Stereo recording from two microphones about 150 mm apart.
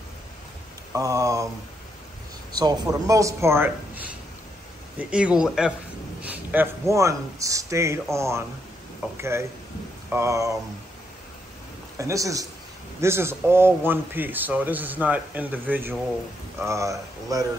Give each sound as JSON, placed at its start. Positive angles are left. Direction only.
{"t": 0.9, "sound": "speech", "side_deg": -20}
{"t": 2.5, "sound": "a man's voice", "side_deg": -25}
{"t": 12.0, "sound": "a man's voice", "side_deg": -20}